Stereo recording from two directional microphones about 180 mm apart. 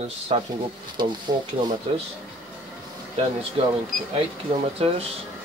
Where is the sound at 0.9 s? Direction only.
25° right (ahead or behind).